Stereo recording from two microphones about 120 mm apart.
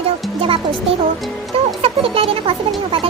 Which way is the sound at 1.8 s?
55° right (ahead or behind).